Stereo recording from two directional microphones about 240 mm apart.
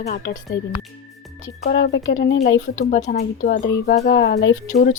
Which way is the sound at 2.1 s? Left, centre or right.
Left.